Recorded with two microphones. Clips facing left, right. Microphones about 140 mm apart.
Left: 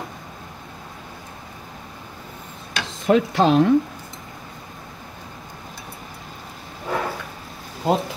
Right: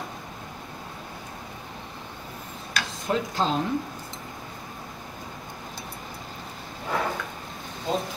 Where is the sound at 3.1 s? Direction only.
80° left.